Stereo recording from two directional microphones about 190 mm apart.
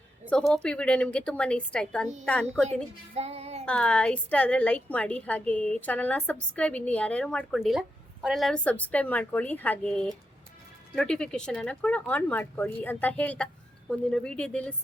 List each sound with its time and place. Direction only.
0.3 s a woman's voice: 5° left (ahead or behind)
3.2 s child singing: 35° right (ahead or behind)
3.7 s a woman's voice: 5° left (ahead or behind)